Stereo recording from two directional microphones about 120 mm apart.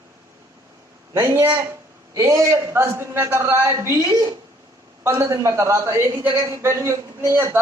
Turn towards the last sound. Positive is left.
turn(degrees=-25)  # may be behind; listen again after turning